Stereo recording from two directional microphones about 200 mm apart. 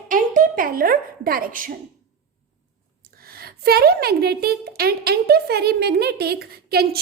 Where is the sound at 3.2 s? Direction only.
50° right (ahead or behind).